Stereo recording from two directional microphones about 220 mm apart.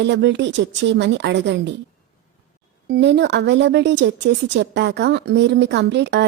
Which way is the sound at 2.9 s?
50° right (ahead or behind).